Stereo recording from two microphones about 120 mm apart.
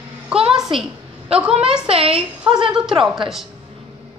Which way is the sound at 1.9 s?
50° right (ahead or behind).